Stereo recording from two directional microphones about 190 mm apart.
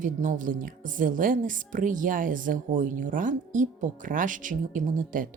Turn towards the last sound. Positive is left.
turn(degrees=-45)  # may be behind; listen again after turning